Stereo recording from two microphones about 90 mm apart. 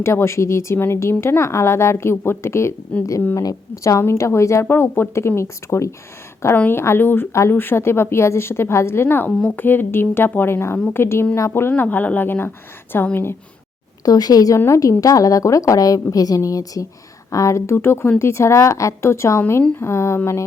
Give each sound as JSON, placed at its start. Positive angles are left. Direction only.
{"t": 0.0, "sound": "a woman's voice", "side_deg": 30}
{"t": 11.7, "sound": "a woman's voice", "side_deg": 20}
{"t": 14.0, "sound": "a woman's voice", "side_deg": 45}